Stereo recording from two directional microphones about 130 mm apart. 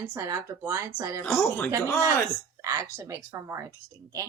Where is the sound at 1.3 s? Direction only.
20° left (ahead or behind).